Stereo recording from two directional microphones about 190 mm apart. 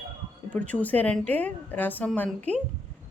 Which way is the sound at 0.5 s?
5° left (ahead or behind).